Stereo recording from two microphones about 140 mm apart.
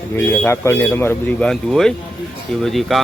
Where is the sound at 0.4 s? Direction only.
20° left (ahead or behind).